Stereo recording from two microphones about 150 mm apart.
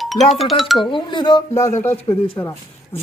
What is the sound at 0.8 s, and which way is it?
Speech, 30° left (ahead or behind).